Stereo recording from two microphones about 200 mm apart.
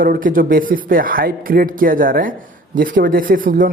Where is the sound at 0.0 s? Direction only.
45° right (ahead or behind).